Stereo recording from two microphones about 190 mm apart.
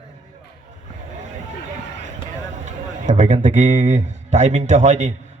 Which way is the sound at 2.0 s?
40° right (ahead or behind).